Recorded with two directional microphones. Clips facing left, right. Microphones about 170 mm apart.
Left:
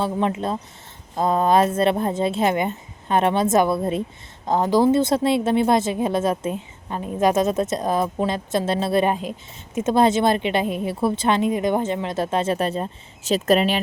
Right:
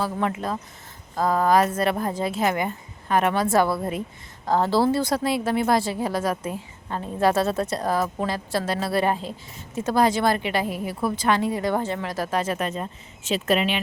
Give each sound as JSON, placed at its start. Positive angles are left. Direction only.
{"t": 0.0, "sound": "speech", "side_deg": 25}